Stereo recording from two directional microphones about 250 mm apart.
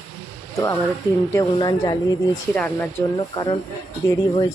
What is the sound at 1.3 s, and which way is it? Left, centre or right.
Speech, centre.